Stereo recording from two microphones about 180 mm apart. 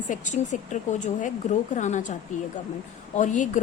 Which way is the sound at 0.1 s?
45° left (ahead or behind).